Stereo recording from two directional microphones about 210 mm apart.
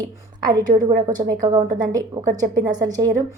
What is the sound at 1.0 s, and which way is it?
A woman's voice, 20° right (ahead or behind).